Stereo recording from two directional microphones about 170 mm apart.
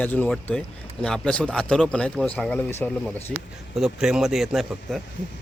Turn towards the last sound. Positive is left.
turn(degrees=0)  # may be behind; listen again after turning